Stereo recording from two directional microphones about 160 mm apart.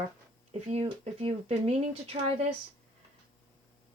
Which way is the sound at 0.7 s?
35° right (ahead or behind).